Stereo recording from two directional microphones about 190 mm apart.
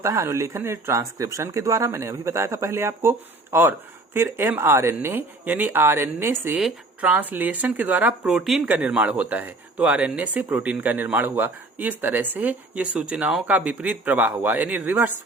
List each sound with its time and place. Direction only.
0.0 s speech: 15° right (ahead or behind)